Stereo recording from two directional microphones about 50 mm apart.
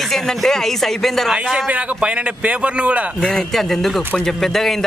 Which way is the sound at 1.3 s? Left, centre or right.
Centre.